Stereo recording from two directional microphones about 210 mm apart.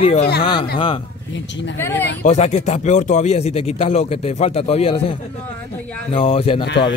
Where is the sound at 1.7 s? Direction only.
10° left (ahead or behind).